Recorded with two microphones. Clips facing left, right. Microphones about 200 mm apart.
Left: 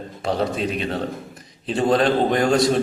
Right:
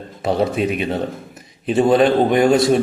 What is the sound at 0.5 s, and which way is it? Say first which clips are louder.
A man's voice: right 4 dB; 10° right (ahead or behind).